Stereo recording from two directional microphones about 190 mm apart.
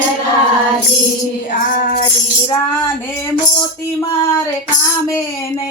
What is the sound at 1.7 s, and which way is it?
Music, 50° left (ahead or behind).